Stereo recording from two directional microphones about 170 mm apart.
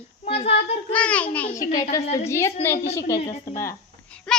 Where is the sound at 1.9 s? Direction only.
20° left (ahead or behind).